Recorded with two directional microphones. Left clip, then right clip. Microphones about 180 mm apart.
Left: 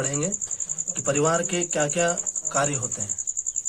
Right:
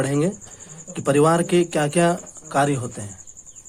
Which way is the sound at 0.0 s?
45° right (ahead or behind).